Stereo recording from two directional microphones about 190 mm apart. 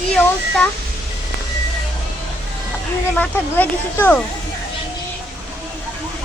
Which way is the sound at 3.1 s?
10° left (ahead or behind).